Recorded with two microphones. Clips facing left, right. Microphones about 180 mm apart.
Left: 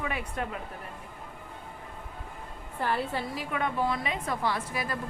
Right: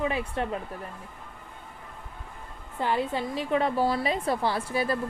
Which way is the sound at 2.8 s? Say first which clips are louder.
Right 3 dB; 20° right (ahead or behind).